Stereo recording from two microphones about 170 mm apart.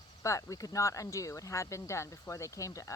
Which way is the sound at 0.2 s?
20° left (ahead or behind).